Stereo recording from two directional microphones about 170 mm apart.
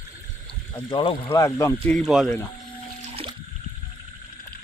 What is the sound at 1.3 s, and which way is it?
Speech, 15° left (ahead or behind).